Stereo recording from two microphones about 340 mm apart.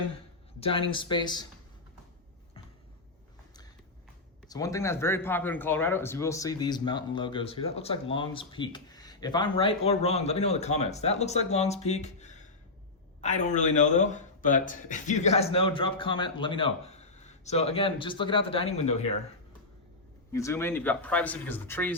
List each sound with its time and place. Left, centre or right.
0.6 s speech: centre
4.4 s speech: centre
20.3 s speech: centre